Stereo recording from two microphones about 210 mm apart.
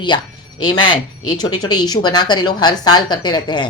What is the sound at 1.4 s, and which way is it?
A man's voice, 20° left (ahead or behind).